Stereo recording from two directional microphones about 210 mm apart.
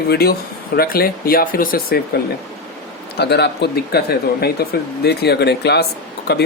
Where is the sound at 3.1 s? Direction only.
50° left (ahead or behind).